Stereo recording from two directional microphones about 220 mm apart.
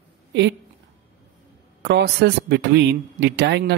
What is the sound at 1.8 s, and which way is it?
A man's voice, 50° right (ahead or behind).